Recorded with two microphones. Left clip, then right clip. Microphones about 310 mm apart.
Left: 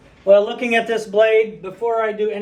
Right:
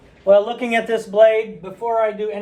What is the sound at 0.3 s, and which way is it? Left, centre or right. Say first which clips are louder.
Speech: left 1 dB; right.